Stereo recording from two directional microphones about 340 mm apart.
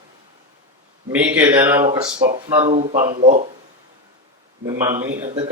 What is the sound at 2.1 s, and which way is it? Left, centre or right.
Speech, right.